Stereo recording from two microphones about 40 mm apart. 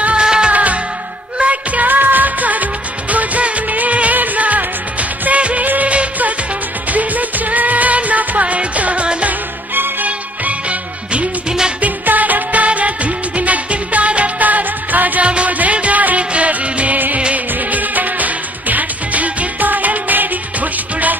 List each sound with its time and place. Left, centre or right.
0.0 s music: right
0.5 s music: right
10.0 s music of bollywood: right
11.8 s music: right
12.6 s music: right
15.2 s music: right